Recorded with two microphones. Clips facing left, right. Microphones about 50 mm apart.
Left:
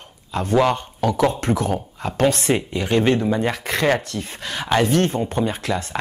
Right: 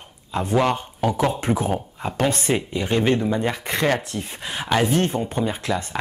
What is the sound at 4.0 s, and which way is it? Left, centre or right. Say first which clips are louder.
Speech: left 1 dB; left.